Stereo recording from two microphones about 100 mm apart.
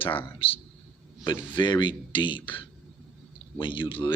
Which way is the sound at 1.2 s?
50° left (ahead or behind).